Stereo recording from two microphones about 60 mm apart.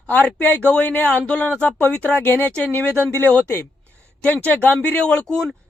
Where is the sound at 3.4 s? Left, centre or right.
Left.